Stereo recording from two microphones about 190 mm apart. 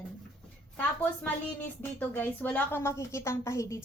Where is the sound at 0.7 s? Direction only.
10° left (ahead or behind).